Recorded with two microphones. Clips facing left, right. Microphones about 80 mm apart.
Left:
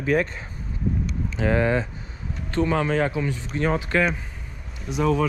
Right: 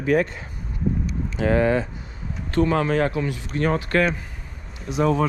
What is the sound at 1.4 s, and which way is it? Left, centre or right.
Speech, right.